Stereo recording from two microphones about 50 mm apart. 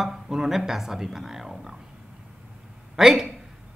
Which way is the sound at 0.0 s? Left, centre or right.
Centre.